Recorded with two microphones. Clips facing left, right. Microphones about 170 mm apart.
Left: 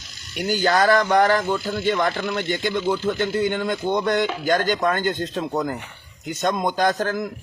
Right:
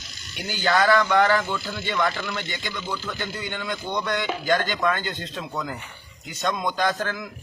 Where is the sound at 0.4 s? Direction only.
45° left (ahead or behind).